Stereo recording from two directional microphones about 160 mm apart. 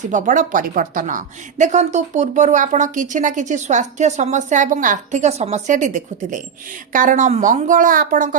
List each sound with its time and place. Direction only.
0.1 s speech: 55° right (ahead or behind)